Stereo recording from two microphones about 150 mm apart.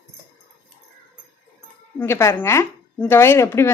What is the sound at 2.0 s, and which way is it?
Speech, 15° left (ahead or behind).